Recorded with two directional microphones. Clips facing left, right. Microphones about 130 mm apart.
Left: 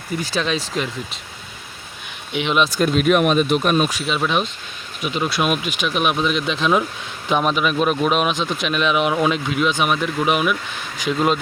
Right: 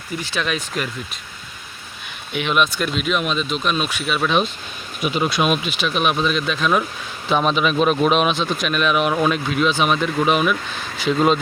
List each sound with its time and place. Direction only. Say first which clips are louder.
0.3 s speech: left 1 dB; 35° left (ahead or behind)
2.3 s speech: left 1 dB; 20° left (ahead or behind)
2.6 s speech: left 6 dB; 40° left (ahead or behind)
5.0 s speech: right 1 dB; 5° right (ahead or behind)
5.8 s speech: left 1 dB; 15° left (ahead or behind)
8.5 s speech: even; 20° left (ahead or behind); by 11.3 s centre (ahead or behind)